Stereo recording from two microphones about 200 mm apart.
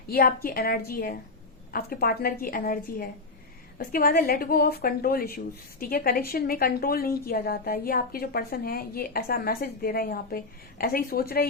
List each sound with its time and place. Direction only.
0.1 s a woman's voice: 50° left (ahead or behind)